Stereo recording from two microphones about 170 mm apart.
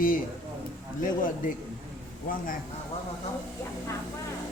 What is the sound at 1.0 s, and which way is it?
Speech, 50° left (ahead or behind).